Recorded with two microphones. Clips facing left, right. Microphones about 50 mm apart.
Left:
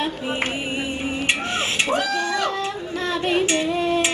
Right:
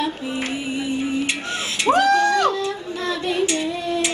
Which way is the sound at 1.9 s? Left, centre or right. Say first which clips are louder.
Right 6 dB; right.